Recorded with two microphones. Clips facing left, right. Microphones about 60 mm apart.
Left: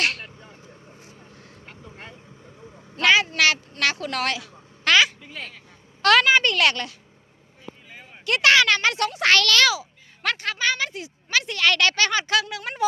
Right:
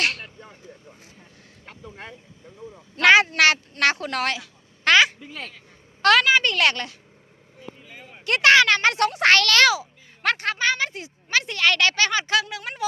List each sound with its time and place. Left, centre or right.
0.0 s vehicle: centre
3.0 s a sound: right
3.2 s speech: right
4.0 s a sound: right
6.1 s a woman's voice: centre
6.5 s speech: right
8.3 s a woman's voice: right
8.9 s a child's voice: right; by 12.6 s centre